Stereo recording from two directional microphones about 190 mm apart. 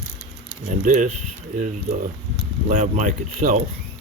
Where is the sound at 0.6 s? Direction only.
40° right (ahead or behind).